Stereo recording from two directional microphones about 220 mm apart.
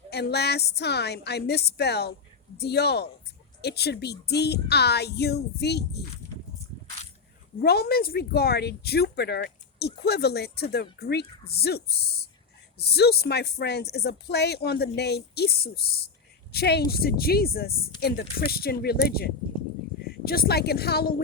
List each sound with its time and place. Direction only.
0.1 s speech: 50° left (ahead or behind)
7.6 s a woman's voice: 45° left (ahead or behind)